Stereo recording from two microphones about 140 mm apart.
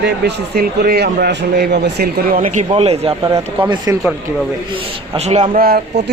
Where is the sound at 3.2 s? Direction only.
20° right (ahead or behind).